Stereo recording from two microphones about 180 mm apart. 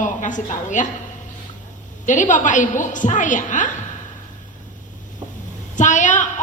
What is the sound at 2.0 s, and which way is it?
A woman's voice, 45° left (ahead or behind).